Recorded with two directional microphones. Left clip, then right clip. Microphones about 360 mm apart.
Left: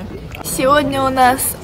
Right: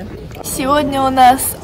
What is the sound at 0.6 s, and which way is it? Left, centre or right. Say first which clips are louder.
Speech: left 1 dB; centre.